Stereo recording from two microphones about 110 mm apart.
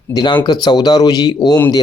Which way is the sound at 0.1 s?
40° left (ahead or behind).